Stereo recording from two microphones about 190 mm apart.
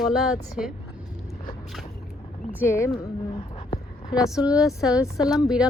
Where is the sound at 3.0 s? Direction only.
25° left (ahead or behind).